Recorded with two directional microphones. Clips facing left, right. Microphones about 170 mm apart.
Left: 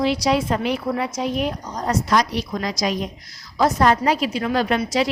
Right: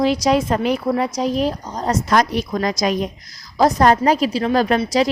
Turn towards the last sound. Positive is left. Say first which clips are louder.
# right 3 dB
turn(degrees=-40)  # may be behind; listen again after turning